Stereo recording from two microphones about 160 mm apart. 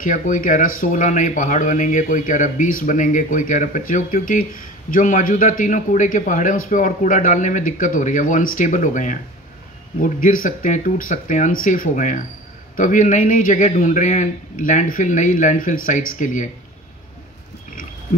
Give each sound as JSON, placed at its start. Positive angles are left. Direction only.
{"t": 0.0, "sound": "speech", "side_deg": 55}